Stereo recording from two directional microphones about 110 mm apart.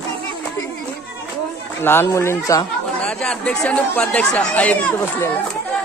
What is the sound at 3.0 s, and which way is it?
Speech, 10° left (ahead or behind).